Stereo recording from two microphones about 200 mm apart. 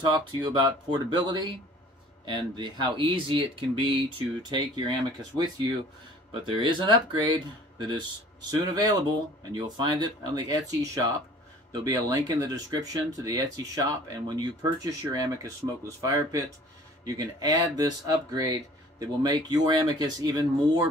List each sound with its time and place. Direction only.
0.1 s speech: 20° right (ahead or behind)